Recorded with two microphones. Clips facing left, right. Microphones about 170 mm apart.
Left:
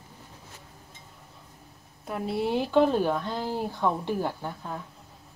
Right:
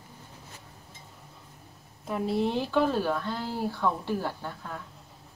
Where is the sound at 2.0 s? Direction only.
Centre (ahead or behind); by 4.7 s 20° left (ahead or behind).